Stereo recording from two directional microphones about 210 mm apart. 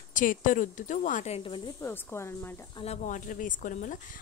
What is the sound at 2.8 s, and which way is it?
A woman's voice, 35° left (ahead or behind).